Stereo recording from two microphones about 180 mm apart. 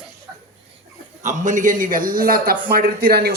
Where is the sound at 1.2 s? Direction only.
45° right (ahead or behind); by 3.3 s 60° right (ahead or behind).